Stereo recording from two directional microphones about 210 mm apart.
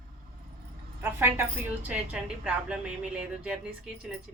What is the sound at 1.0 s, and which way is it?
A woman's voice, 10° right (ahead or behind).